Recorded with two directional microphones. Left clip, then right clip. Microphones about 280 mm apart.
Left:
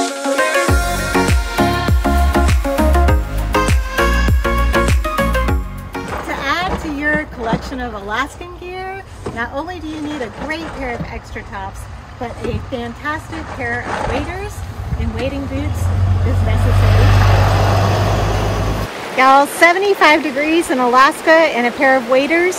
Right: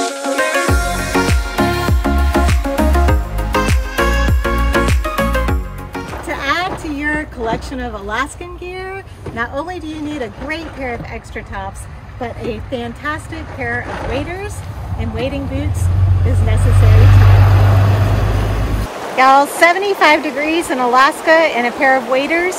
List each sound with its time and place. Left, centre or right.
0.0 s music: centre
7.7 s speech: centre
9.4 s speech: centre
12.7 s speech: centre
15.1 s speech: centre
16.6 s vehicle: left
19.1 s speech: centre